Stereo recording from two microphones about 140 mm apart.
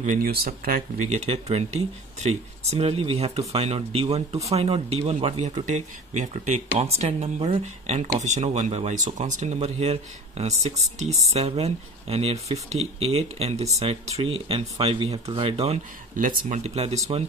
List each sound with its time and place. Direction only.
0.0 s speech: 80° right; by 15.8 s 45° right (ahead or behind)
16.2 s speech: 70° right (ahead or behind); by 16.9 s 50° right (ahead or behind)